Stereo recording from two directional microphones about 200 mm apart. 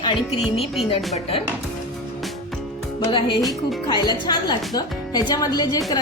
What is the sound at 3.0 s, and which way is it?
Speech, 25° left (ahead or behind).